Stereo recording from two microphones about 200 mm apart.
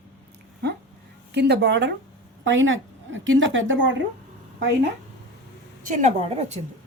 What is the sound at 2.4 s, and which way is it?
A woman's voice, 70° right (ahead or behind).